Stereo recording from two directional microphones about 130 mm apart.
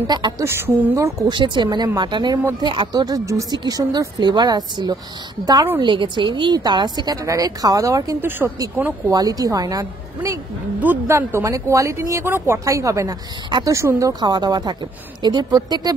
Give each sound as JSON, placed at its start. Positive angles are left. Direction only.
{"t": 0.0, "sound": "a woman's voice", "side_deg": -35}
{"t": 1.3, "sound": "a woman's voice", "side_deg": -35}
{"t": 9.1, "sound": "a woman's voice", "side_deg": -30}
{"t": 10.8, "sound": "a woman's voice", "side_deg": -15}